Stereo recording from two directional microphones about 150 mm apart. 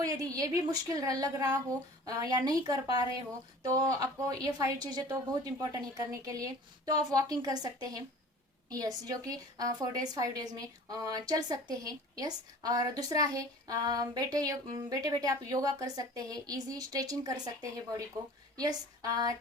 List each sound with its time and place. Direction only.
0.3 s a woman's voice: 25° right (ahead or behind)